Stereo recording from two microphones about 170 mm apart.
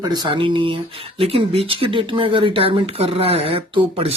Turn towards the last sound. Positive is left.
turn(degrees=-35)  # may be behind; listen again after turning